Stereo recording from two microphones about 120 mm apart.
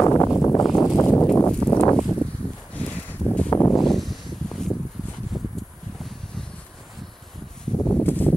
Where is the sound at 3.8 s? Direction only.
Centre (ahead or behind).